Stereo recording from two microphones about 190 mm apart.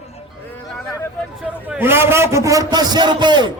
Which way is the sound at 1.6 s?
10° right (ahead or behind).